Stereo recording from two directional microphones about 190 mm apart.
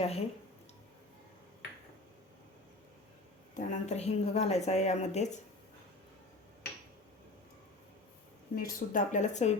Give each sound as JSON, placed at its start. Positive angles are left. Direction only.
{"t": 0.0, "sound": "speech", "side_deg": 30}
{"t": 3.5, "sound": "speech", "side_deg": 40}
{"t": 8.5, "sound": "speech", "side_deg": 45}